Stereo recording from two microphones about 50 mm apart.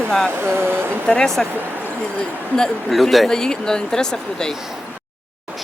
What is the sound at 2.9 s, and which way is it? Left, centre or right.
Speech, centre.